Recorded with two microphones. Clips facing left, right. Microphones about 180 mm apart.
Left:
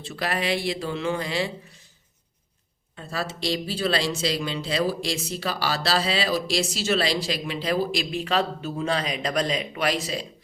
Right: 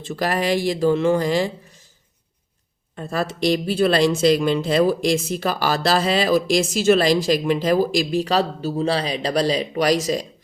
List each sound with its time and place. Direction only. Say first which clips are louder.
0.0 s speech: right 6 dB; 45° right (ahead or behind)
2.9 s speech: right 6 dB; 50° right (ahead or behind)